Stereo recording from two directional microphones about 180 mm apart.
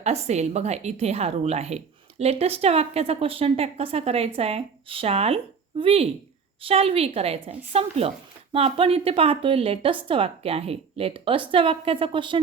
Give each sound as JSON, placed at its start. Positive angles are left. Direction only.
{"t": 0.0, "sound": "a woman's voice", "side_deg": -35}